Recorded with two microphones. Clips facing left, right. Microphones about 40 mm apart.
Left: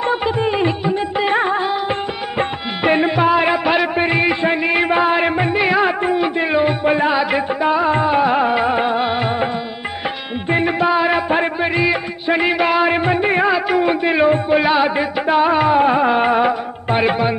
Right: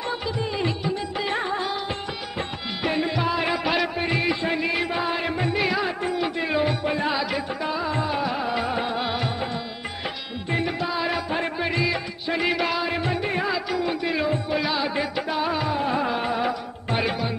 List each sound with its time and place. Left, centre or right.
0.0 s music: left
10.5 s music: left